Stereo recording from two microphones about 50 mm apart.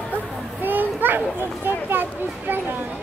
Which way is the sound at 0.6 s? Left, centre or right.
Right.